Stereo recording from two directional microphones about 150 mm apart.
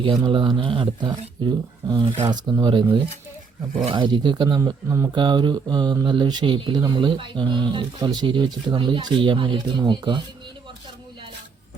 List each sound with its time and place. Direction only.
0.0 s speech: 30° right (ahead or behind)
3.8 s speech: 30° right (ahead or behind)